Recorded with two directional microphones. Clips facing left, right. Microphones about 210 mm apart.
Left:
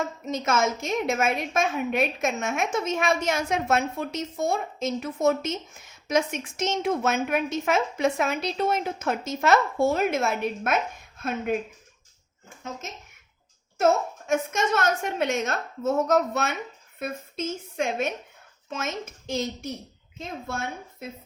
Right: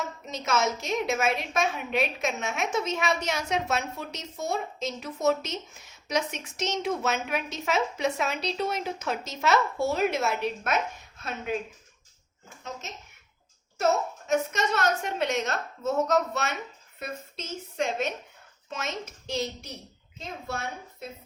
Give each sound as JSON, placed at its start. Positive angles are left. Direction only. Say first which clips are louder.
{"t": 0.3, "sound": "a woman's voice", "louder": "left 2 dB", "side_deg": 50}
{"t": 14.3, "sound": "a woman's voice", "louder": "left 2 dB", "side_deg": 50}